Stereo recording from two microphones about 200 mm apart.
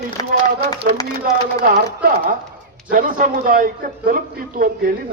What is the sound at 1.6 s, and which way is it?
A man's voice, 45° right (ahead or behind).